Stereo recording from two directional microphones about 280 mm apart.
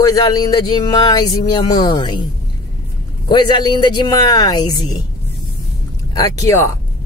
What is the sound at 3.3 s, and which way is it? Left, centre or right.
Speech, centre.